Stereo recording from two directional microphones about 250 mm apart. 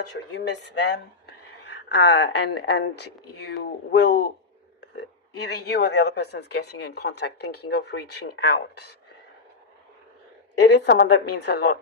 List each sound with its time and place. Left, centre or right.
0.1 s speech: left
5.4 s a woman's voice: left
10.6 s a woman's voice: left